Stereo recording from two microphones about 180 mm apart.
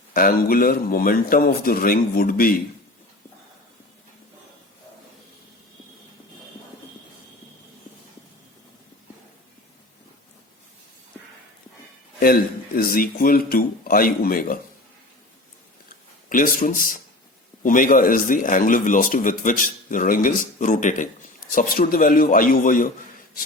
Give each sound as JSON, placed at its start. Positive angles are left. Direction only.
{"t": 0.1, "sound": "a man's voice", "side_deg": 55}
{"t": 12.2, "sound": "a man's voice", "side_deg": 55}
{"t": 16.3, "sound": "a man's voice", "side_deg": 50}